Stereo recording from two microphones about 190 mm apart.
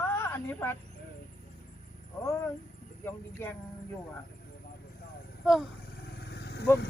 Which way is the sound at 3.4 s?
10° left (ahead or behind).